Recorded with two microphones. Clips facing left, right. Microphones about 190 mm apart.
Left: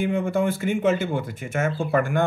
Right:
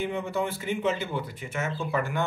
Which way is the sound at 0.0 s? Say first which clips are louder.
Left 6 dB; 50° left (ahead or behind).